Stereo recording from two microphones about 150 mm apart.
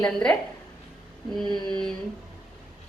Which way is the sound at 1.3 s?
Centre (ahead or behind).